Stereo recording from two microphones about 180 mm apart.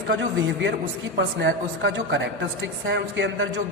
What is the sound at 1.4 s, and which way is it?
A man's voice, 75° right (ahead or behind).